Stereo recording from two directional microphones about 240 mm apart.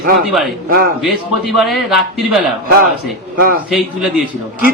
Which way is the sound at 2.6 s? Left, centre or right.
Right.